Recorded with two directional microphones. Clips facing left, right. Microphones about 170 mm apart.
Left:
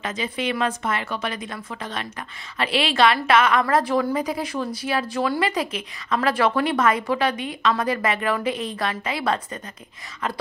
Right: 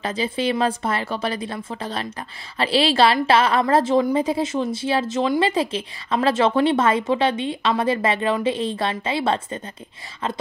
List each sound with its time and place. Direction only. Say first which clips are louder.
0.0 s a woman's voice: right 4 dB; 30° right (ahead or behind)